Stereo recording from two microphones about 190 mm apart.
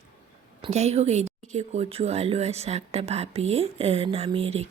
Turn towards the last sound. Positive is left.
turn(degrees=-30)  # may be behind; listen again after turning